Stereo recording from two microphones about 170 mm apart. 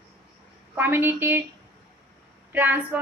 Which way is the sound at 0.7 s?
10° right (ahead or behind).